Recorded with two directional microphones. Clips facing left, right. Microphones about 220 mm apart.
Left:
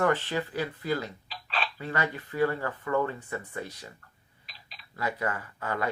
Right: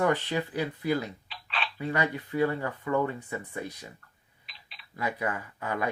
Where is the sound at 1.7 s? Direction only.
15° right (ahead or behind).